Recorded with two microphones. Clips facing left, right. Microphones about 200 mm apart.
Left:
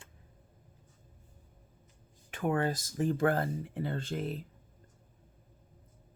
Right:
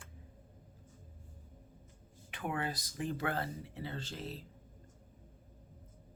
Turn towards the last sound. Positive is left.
turn(degrees=50)  # may be behind; listen again after turning